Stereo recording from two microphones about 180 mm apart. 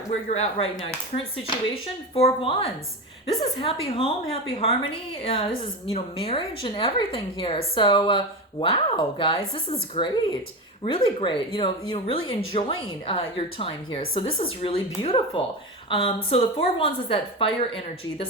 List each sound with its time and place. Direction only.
0.3 s a woman's voice: 35° left (ahead or behind)
3.6 s a woman's voice: 30° left (ahead or behind)